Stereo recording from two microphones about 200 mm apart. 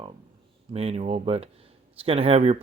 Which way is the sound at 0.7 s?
30° right (ahead or behind).